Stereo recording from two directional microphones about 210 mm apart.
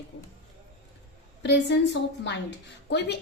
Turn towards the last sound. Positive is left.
turn(degrees=55)  # may be behind; listen again after turning